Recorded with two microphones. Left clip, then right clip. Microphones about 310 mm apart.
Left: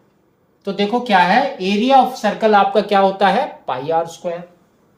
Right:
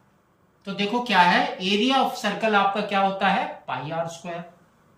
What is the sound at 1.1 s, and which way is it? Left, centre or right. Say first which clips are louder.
Speech: left 5 dB; centre.